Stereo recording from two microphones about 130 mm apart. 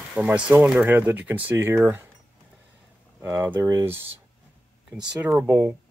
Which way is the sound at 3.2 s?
20° right (ahead or behind).